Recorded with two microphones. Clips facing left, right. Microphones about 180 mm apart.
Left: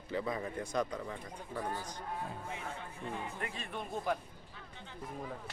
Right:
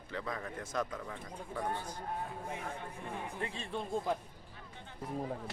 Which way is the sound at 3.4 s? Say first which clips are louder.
Right 2 dB; 25° right (ahead or behind).